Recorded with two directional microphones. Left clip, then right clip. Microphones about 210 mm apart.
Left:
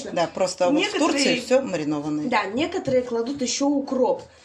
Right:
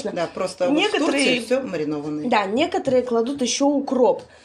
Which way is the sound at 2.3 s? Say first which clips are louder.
Right 5 dB; 50° right (ahead or behind).